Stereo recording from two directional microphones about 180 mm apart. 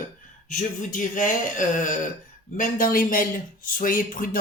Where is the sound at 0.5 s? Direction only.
45° left (ahead or behind).